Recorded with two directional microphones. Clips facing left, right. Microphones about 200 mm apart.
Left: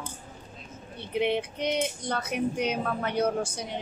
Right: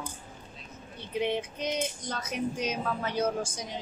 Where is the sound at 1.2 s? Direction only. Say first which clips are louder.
Left 3 dB; 65° left (ahead or behind).